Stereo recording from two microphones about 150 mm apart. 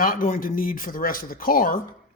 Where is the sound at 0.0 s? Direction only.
70° left (ahead or behind).